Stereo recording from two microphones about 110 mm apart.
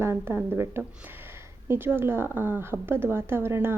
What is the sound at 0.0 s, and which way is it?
A woman's voice, 25° right (ahead or behind).